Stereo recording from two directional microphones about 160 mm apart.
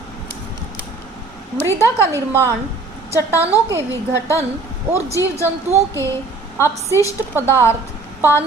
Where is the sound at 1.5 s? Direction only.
15° left (ahead or behind).